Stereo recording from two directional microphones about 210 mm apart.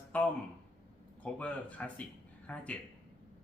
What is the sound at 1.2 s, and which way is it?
Speech, 5° left (ahead or behind).